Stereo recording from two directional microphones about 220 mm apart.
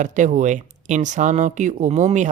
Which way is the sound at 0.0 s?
35° right (ahead or behind).